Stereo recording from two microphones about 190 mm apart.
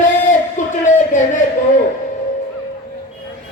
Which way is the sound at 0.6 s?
40° left (ahead or behind).